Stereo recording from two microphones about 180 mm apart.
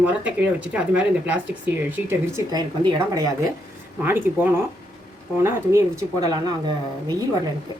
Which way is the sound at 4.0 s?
10° right (ahead or behind).